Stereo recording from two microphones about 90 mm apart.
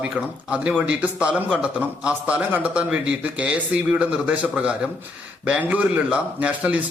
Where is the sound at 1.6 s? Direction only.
15° right (ahead or behind).